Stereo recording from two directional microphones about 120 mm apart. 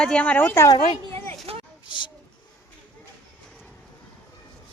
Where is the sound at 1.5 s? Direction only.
55° right (ahead or behind).